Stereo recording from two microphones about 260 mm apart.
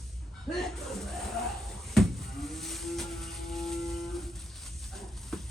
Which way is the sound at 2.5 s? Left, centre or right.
Centre.